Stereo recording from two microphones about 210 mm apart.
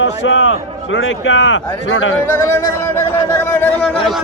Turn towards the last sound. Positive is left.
turn(degrees=0)  # may be behind; listen again after turning